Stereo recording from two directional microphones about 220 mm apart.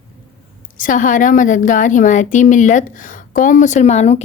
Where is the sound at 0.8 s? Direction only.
35° left (ahead or behind).